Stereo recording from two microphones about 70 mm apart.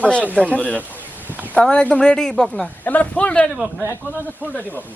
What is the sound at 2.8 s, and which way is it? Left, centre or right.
Speech, left.